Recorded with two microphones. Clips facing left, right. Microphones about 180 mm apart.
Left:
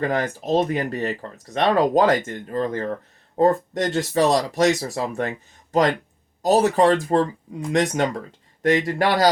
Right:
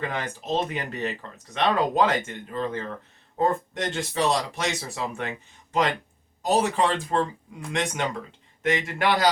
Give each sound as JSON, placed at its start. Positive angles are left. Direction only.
{"t": 0.0, "sound": "speech", "side_deg": 40}
{"t": 6.4, "sound": "speech", "side_deg": 40}